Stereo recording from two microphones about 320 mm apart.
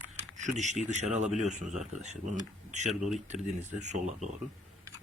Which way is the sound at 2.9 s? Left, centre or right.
Centre.